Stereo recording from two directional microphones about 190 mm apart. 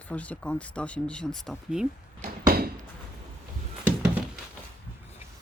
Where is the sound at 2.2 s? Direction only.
50° right (ahead or behind).